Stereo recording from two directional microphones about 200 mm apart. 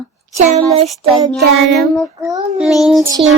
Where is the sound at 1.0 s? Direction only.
25° right (ahead or behind).